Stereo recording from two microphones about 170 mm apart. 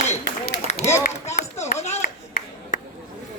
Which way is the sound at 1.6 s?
40° left (ahead or behind).